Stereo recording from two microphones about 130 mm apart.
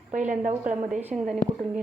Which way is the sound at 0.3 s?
70° right (ahead or behind).